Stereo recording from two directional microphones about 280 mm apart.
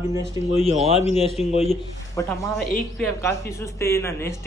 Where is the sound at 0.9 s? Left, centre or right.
Left.